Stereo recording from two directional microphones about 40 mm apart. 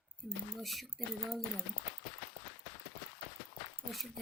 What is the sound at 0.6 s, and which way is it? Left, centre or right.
Speech, centre.